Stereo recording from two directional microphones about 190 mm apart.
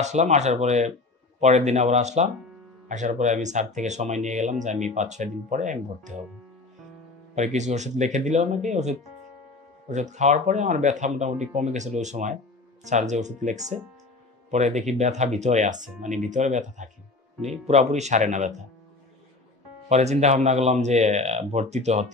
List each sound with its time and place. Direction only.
0.0 s speech: 40° right (ahead or behind)
7.3 s speech: 40° right (ahead or behind)
19.9 s speech: 35° right (ahead or behind)